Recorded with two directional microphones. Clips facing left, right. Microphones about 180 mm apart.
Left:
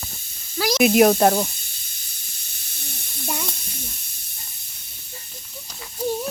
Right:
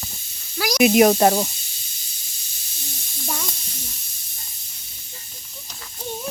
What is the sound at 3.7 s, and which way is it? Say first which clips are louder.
Snake: left 2 dB; 55° left (ahead or behind).